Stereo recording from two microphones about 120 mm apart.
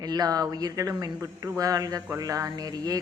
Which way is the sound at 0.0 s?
35° right (ahead or behind).